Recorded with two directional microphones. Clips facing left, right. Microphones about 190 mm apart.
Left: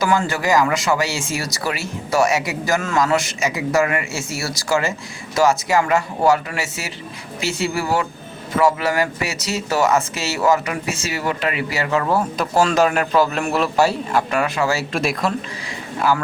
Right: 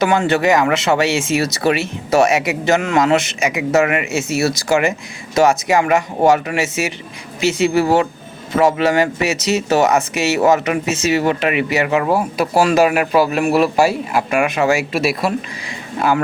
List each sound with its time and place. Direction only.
0.0 s speech: 25° right (ahead or behind); by 15.3 s 10° right (ahead or behind)
16.0 s speech: 20° right (ahead or behind)